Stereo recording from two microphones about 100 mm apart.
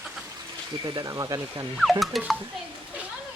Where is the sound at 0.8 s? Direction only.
40° right (ahead or behind).